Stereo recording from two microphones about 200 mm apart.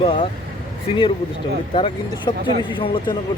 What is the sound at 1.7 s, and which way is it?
Speech, 25° left (ahead or behind).